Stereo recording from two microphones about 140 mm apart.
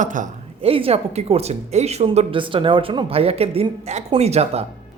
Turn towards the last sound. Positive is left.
turn(degrees=-50)  # may be behind; listen again after turning